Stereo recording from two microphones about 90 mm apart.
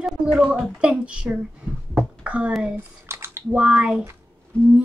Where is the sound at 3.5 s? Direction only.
15° right (ahead or behind).